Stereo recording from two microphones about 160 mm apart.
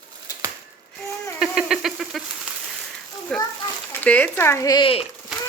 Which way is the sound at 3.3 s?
5° left (ahead or behind).